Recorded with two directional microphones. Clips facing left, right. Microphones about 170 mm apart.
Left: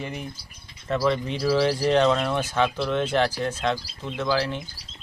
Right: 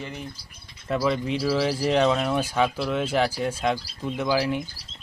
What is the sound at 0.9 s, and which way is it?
Speech, 5° right (ahead or behind).